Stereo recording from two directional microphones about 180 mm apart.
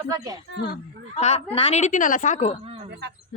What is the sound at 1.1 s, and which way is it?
Speech, 35° left (ahead or behind).